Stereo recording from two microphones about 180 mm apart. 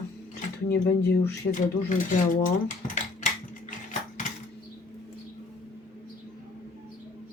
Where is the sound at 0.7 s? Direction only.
70° left (ahead or behind).